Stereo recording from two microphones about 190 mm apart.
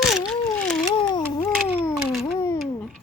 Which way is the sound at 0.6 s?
5° left (ahead or behind).